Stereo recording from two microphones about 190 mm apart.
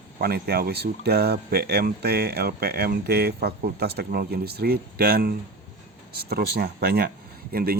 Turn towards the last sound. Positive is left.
turn(degrees=-50)  # may be behind; listen again after turning